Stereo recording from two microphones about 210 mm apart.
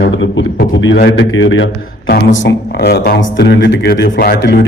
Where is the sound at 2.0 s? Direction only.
50° left (ahead or behind).